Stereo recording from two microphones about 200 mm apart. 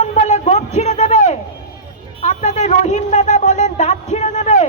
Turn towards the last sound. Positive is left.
turn(degrees=35)  # may be behind; listen again after turning